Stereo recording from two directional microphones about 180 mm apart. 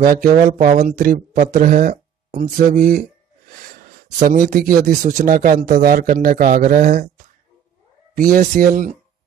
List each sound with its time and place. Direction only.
0.0 s speech: 50° right (ahead or behind)
4.2 s speech: 50° right (ahead or behind)
8.1 s speech: 45° right (ahead or behind)